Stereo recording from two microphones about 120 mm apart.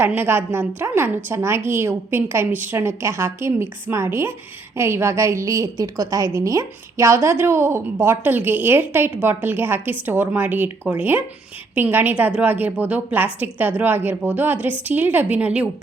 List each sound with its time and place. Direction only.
0.2 s a woman's voice: 20° right (ahead or behind)